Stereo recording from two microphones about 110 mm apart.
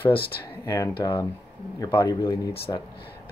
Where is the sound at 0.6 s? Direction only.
30° left (ahead or behind).